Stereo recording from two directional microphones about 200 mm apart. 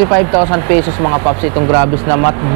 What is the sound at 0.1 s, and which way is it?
Speech, 20° right (ahead or behind).